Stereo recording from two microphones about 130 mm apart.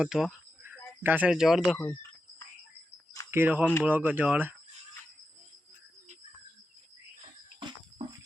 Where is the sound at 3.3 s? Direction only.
15° right (ahead or behind).